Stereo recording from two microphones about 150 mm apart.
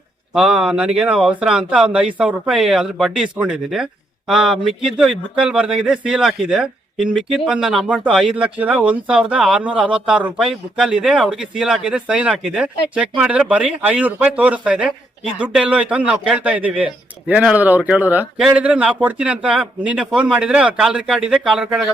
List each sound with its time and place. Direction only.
0.3 s speech: 5° right (ahead or behind)